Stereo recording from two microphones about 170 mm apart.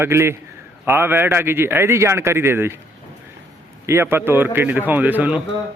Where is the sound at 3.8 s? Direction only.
15° right (ahead or behind).